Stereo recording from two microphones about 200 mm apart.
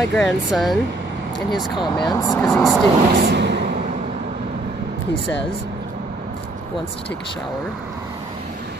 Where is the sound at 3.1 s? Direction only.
60° right (ahead or behind); by 4.1 s 40° right (ahead or behind).